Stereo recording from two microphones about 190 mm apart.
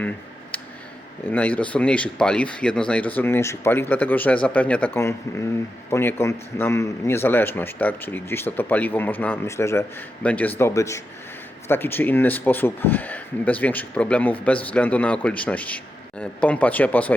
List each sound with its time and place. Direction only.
1.2 s a man's voice: 10° left (ahead or behind)